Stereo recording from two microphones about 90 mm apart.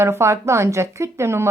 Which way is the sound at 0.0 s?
30° right (ahead or behind).